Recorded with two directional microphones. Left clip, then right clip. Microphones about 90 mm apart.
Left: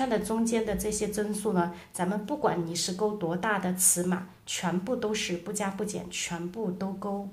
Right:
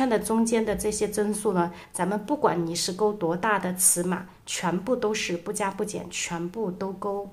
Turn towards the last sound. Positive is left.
turn(degrees=-40)  # may be behind; listen again after turning